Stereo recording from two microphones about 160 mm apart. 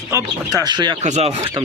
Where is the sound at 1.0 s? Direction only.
45° right (ahead or behind).